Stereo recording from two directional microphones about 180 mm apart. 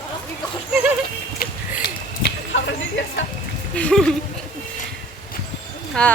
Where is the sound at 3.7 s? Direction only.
5° left (ahead or behind).